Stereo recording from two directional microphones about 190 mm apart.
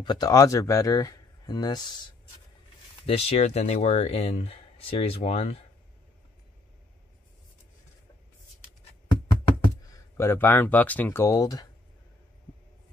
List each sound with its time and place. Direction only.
0.0 s speech: 20° left (ahead or behind)
3.1 s speech: 35° left (ahead or behind)
9.9 s speech: 15° left (ahead or behind)